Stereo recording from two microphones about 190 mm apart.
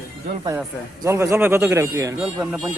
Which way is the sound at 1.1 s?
15° right (ahead or behind).